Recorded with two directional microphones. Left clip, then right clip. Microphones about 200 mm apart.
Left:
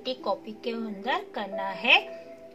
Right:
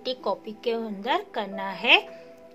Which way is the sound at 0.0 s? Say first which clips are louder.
Right 1 dB; 50° right (ahead or behind).